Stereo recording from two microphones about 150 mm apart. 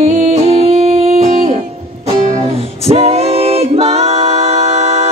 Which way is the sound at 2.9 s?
45° right (ahead or behind).